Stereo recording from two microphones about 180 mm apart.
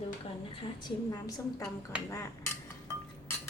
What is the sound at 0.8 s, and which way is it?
Speech, 25° left (ahead or behind).